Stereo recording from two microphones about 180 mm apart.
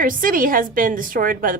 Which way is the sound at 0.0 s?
50° right (ahead or behind).